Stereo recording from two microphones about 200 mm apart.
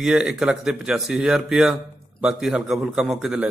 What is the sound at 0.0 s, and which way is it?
A man's voice, 5° right (ahead or behind).